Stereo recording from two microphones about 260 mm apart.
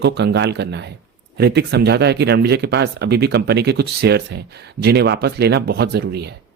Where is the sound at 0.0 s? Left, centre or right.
Right.